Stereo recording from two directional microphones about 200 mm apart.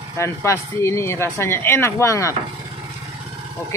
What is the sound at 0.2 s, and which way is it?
Speech, 15° left (ahead or behind).